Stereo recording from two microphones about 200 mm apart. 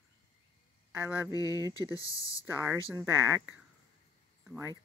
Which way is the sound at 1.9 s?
15° left (ahead or behind).